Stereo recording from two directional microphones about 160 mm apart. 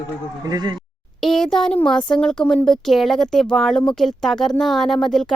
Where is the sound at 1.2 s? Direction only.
Centre (ahead or behind).